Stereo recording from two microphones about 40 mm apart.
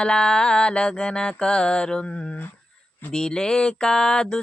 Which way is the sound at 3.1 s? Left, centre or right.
Centre.